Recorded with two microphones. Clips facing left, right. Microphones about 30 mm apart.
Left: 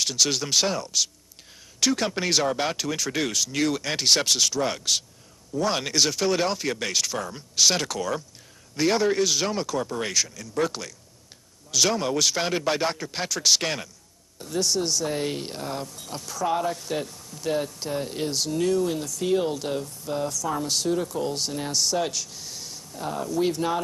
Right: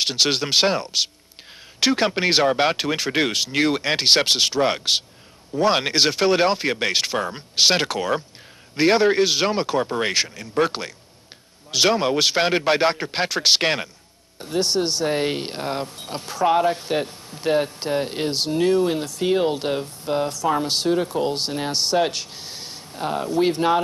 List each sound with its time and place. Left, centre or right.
0.0 s speech: right